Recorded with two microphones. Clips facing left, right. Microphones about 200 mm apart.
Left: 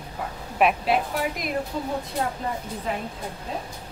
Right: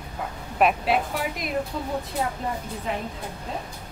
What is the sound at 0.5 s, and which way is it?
A woman's voice, centre (ahead or behind).